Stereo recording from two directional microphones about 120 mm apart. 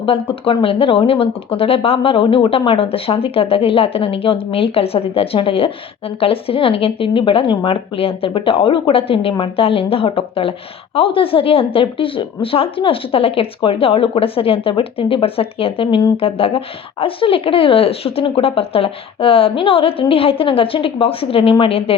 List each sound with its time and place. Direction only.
0.0 s speech: 50° left (ahead or behind)